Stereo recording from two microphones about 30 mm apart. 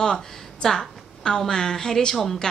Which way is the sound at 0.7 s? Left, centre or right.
Left.